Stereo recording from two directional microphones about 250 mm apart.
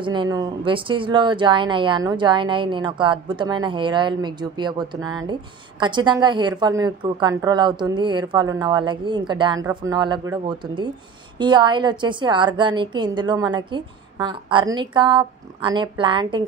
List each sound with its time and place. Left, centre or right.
0.0 s a woman's voice: centre